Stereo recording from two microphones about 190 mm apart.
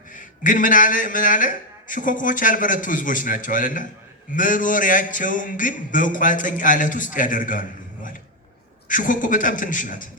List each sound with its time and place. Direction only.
0.1 s a man's voice: 45° left (ahead or behind)